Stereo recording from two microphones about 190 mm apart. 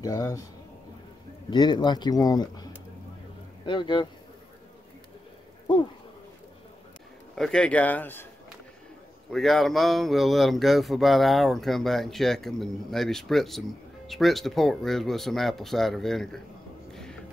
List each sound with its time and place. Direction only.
0.0 s speech: 15° left (ahead or behind)
1.5 s speech: 25° left (ahead or behind)
3.6 s speech: 25° left (ahead or behind)
7.3 s speech: 5° left (ahead or behind)
9.3 s speech: centre (ahead or behind)
16.9 s a sound: 5° left (ahead or behind)